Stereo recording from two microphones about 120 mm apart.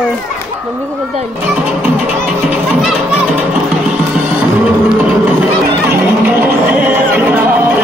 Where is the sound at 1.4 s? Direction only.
15° right (ahead or behind).